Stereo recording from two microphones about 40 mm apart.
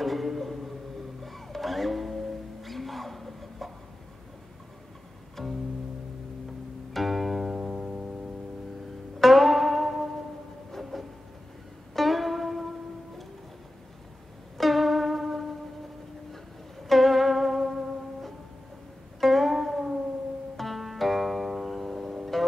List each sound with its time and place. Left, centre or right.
0.0 s a sound: centre
1.2 s music: centre
5.4 s bowed string instrument: centre
6.9 s music: centre
7.5 s music: right
9.2 s music: centre
10.8 s train: centre
11.9 s music: centre
14.6 s music: centre
16.8 s music: centre